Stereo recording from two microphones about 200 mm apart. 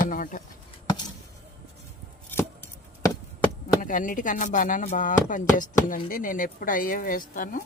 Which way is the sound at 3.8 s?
40° left (ahead or behind).